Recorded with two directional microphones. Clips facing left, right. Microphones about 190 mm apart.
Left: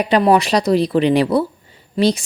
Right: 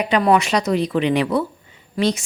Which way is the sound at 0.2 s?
30° left (ahead or behind).